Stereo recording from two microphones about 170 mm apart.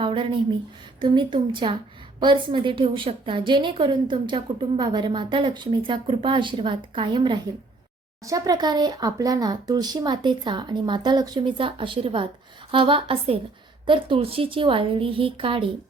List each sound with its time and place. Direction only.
0.0 s a woman's voice: 30° right (ahead or behind)